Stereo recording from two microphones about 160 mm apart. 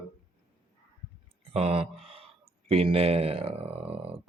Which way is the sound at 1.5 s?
40° right (ahead or behind).